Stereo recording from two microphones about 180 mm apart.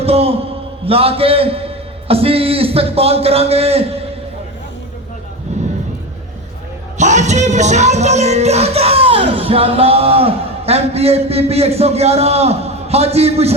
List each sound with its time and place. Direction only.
0.0 s a man's voice: 35° right (ahead or behind)
5.5 s a sound: 40° right (ahead or behind)
7.0 s music: 40° right (ahead or behind)